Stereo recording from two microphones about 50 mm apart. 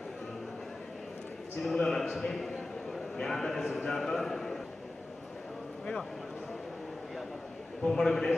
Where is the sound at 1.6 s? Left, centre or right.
Centre.